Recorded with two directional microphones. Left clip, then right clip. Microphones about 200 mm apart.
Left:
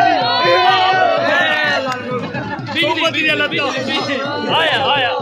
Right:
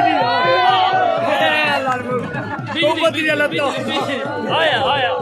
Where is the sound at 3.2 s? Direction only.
10° right (ahead or behind).